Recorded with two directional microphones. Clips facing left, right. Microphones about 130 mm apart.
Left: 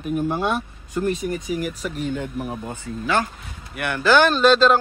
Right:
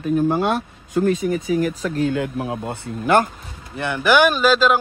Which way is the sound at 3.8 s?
20° right (ahead or behind).